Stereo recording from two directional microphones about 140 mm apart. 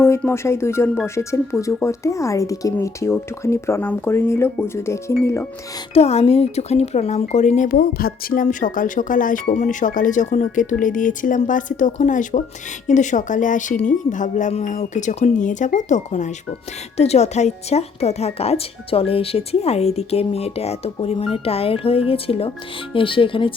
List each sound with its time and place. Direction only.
0.2 s speech: 20° left (ahead or behind)
5.9 s speech: 50° left (ahead or behind); by 9.4 s 75° left (ahead or behind)
9.5 s speech: 60° left (ahead or behind); by 23.6 s 40° left (ahead or behind)